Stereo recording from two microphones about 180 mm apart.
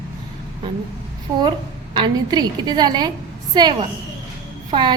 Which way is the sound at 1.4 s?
25° right (ahead or behind).